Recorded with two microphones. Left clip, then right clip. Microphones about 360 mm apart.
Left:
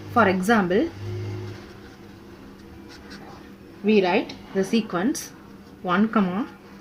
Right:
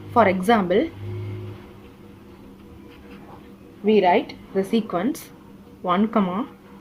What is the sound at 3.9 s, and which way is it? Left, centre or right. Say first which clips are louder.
Speech: right 3 dB; right.